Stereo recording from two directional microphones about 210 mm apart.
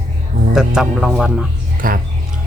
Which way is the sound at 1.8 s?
40° right (ahead or behind).